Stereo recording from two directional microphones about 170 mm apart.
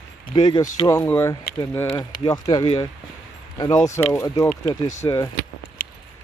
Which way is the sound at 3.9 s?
15° left (ahead or behind).